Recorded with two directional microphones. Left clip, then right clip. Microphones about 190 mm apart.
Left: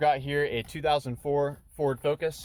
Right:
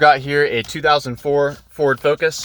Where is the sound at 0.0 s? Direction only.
15° right (ahead or behind).